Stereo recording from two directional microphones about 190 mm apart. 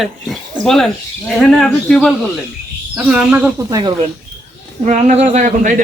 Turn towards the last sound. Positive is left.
turn(degrees=-40)  # may be behind; listen again after turning